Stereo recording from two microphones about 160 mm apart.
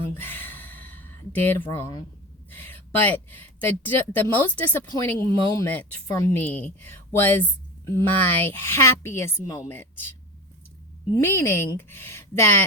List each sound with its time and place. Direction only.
0.1 s a sound: 10° left (ahead or behind)
2.6 s a woman's voice: 10° left (ahead or behind)
11.1 s a woman's voice: 15° left (ahead or behind)